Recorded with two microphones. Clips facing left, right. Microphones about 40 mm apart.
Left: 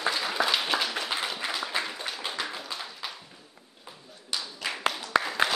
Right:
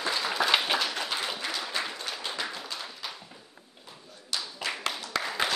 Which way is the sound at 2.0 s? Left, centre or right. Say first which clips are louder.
Left 1 dB; centre.